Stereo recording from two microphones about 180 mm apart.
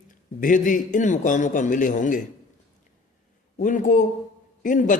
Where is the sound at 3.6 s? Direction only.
45° left (ahead or behind).